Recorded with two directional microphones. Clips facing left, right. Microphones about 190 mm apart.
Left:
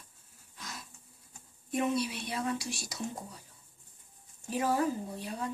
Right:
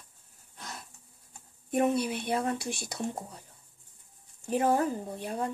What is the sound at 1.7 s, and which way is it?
Speech, 55° right (ahead or behind).